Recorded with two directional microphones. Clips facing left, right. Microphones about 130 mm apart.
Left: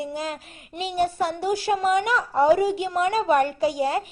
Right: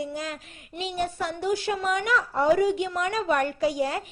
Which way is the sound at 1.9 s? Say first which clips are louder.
Left 4 dB; 5° left (ahead or behind).